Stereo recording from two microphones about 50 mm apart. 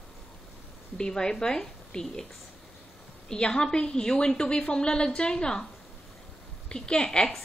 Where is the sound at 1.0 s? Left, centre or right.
Centre.